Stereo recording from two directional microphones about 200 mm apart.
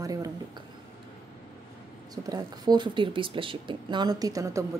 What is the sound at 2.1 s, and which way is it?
Speech, 20° right (ahead or behind).